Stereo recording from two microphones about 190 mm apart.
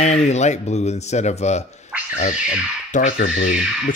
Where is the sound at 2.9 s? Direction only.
40° left (ahead or behind).